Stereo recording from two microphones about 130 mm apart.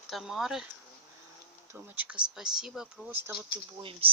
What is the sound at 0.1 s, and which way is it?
Speech, centre (ahead or behind).